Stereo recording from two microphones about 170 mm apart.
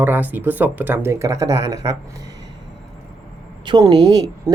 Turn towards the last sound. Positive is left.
turn(degrees=-25)  # may be behind; listen again after turning